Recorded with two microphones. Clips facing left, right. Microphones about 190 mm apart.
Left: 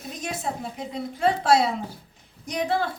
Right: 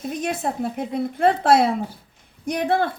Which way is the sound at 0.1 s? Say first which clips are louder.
Right 4 dB; 55° right (ahead or behind).